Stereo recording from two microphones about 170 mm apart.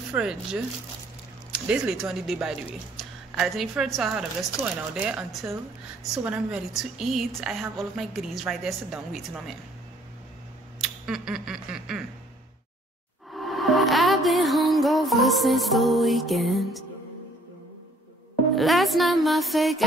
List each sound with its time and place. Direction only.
0.1 s a woman's voice: 5° right (ahead or behind)
10.8 s a sound: centre (ahead or behind)
13.3 s music: centre (ahead or behind)
18.5 s speech: centre (ahead or behind)